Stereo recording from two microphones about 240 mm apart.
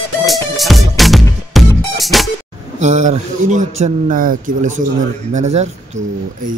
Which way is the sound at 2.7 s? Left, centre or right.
Right.